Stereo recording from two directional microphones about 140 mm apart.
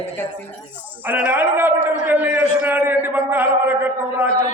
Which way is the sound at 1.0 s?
15° right (ahead or behind).